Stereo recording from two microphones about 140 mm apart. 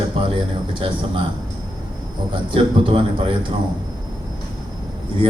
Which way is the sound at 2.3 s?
40° right (ahead or behind).